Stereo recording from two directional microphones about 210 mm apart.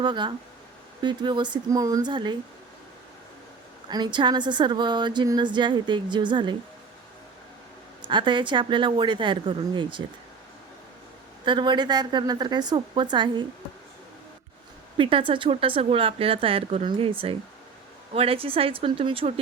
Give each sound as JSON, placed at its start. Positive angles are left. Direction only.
{"t": 0.0, "sound": "speech", "side_deg": -20}
{"t": 3.8, "sound": "speech", "side_deg": -20}
{"t": 8.0, "sound": "speech", "side_deg": -20}
{"t": 11.4, "sound": "speech", "side_deg": -20}
{"t": 14.9, "sound": "speech", "side_deg": -25}